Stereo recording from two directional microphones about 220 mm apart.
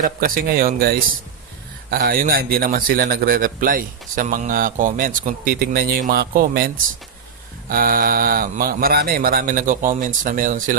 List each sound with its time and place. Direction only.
0.0 s a man's voice: 40° right (ahead or behind)
7.7 s a man's voice: 40° right (ahead or behind)